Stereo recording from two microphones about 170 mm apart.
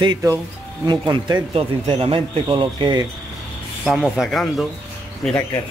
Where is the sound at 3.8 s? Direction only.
5° right (ahead or behind).